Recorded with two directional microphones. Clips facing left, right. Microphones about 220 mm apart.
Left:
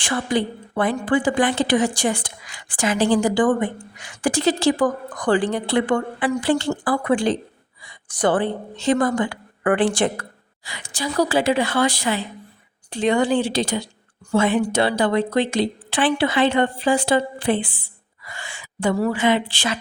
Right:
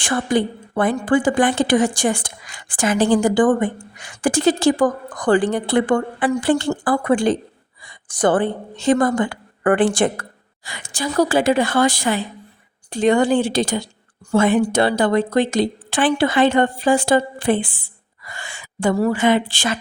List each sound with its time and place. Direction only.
0.0 s a woman's voice: 50° right (ahead or behind)